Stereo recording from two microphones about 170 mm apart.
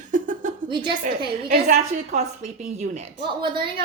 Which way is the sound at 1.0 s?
60° right (ahead or behind).